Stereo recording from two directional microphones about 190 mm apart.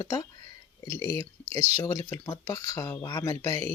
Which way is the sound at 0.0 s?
15° left (ahead or behind).